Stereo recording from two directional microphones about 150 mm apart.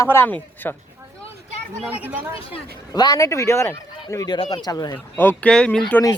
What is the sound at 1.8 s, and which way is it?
Speech, 10° right (ahead or behind).